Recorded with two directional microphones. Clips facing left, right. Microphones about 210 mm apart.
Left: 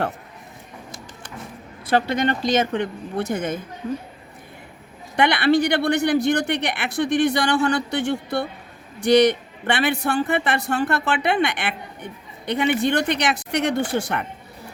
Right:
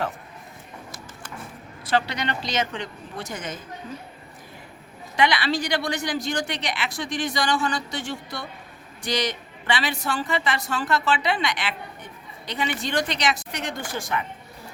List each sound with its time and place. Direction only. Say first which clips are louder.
1.9 s a woman's voice: left 5 dB; 55° left (ahead or behind)
5.1 s a woman's voice: left 5 dB; 60° left (ahead or behind)